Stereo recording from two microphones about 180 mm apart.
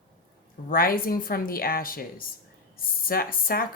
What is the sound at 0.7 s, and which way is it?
Speech, 55° left (ahead or behind).